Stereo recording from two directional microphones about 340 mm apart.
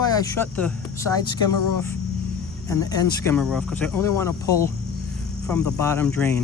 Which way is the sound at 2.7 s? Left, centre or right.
Centre.